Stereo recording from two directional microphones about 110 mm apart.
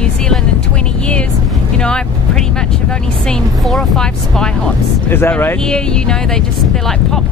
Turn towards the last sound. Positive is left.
turn(degrees=5)  # may be behind; listen again after turning